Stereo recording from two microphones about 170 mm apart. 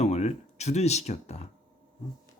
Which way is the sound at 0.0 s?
40° left (ahead or behind).